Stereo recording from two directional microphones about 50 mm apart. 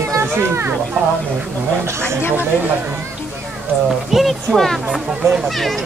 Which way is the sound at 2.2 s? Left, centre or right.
Left.